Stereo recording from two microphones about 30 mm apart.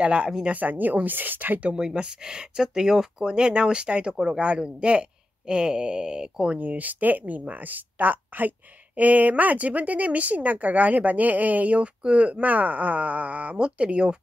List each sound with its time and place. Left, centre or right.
0.0 s speech: right
0.5 s speech: right
2.0 s speech: right
3.3 s speech: right
6.6 s speech: right
11.7 s speech: right
13.6 s speech: right